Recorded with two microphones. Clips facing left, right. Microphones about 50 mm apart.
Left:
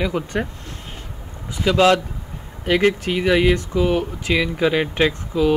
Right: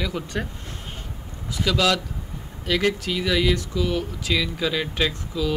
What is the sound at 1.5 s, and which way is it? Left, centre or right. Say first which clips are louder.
Speech: left 6 dB; left.